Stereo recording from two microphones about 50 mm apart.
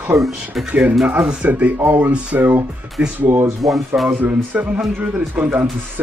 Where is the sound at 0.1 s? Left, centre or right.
Right.